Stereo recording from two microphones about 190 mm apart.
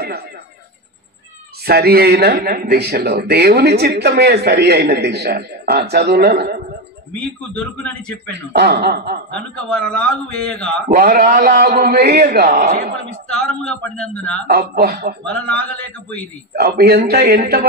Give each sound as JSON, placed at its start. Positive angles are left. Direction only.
{"t": 1.6, "sound": "speech", "side_deg": -55}
{"t": 7.2, "sound": "a man's voice", "side_deg": 5}
{"t": 8.5, "sound": "speech", "side_deg": -60}
{"t": 9.3, "sound": "a man's voice", "side_deg": 5}
{"t": 10.9, "sound": "a man's voice", "side_deg": -50}
{"t": 13.3, "sound": "a man's voice", "side_deg": 5}
{"t": 14.5, "sound": "speech", "side_deg": -55}
{"t": 15.2, "sound": "a man's voice", "side_deg": 5}
{"t": 16.5, "sound": "speech", "side_deg": -55}